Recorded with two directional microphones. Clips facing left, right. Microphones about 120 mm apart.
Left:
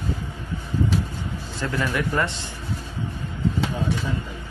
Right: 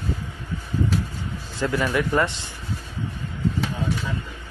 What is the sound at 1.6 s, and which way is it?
Speech, 20° right (ahead or behind).